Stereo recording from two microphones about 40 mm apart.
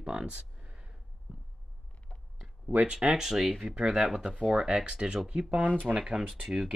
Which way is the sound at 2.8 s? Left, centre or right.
Right.